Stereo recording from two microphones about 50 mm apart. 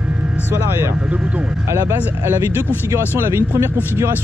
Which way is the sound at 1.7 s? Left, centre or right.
Right.